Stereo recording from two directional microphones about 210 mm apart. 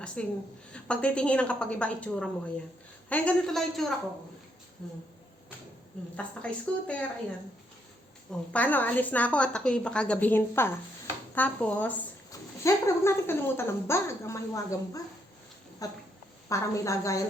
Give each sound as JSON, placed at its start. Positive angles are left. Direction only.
{"t": 0.2, "sound": "a woman's voice", "side_deg": 5}
{"t": 6.1, "sound": "a woman's voice", "side_deg": 5}
{"t": 8.5, "sound": "a woman's voice", "side_deg": 10}